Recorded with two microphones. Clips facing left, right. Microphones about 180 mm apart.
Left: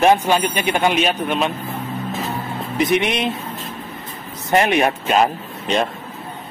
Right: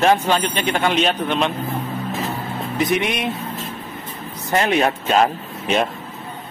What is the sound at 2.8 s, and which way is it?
Speech, 20° left (ahead or behind).